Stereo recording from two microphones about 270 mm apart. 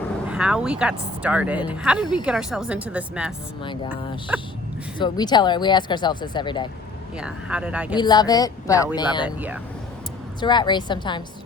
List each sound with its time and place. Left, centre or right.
0.3 s speech: centre
4.9 s speech: centre
7.2 s speech: centre
7.9 s speech: centre
9.2 s speech: centre
10.4 s speech: centre